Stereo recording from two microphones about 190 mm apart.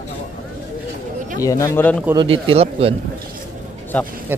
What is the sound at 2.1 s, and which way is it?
Speech, 30° right (ahead or behind).